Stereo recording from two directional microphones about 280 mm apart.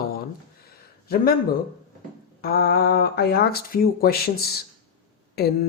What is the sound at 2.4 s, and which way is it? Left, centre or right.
Speech, left.